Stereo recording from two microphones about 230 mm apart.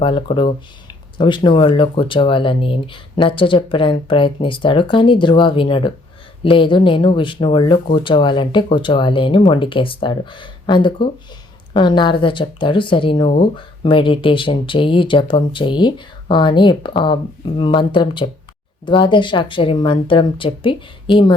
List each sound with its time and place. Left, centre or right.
0.0 s speech: left